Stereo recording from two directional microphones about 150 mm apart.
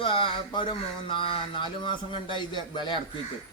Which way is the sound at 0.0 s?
35° left (ahead or behind).